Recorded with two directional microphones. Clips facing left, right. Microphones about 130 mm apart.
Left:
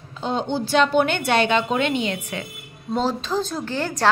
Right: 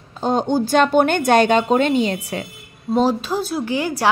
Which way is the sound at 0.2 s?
45° right (ahead or behind).